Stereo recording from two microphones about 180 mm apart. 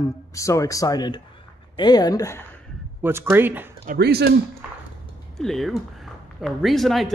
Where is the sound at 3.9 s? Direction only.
65° right (ahead or behind).